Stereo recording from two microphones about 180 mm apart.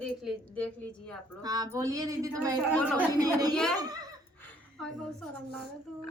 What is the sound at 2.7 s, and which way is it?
Speech, 10° left (ahead or behind).